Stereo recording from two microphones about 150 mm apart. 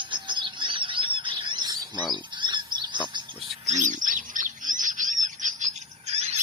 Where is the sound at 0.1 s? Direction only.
30° right (ahead or behind).